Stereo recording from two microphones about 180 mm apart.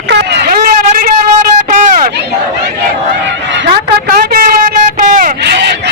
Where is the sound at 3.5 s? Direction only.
65° right (ahead or behind); by 5.3 s 50° right (ahead or behind).